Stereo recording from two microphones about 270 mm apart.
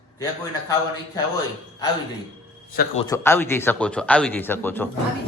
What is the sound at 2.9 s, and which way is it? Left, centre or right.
A man's voice, centre.